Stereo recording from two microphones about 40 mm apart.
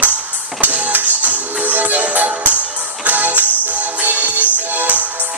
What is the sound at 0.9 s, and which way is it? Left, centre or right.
Music, right.